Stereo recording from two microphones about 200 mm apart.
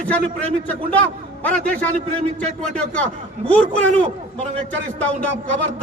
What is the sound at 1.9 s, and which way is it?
Speech, 35° right (ahead or behind).